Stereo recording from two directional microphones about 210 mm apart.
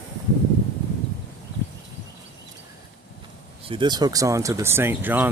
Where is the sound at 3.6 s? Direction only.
20° right (ahead or behind).